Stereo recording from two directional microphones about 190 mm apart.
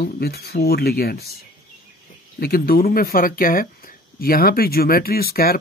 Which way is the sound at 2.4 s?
50° left (ahead or behind).